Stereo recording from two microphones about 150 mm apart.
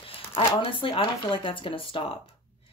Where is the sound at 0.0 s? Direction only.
40° left (ahead or behind).